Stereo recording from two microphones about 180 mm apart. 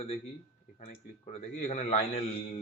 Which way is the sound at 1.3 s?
35° left (ahead or behind).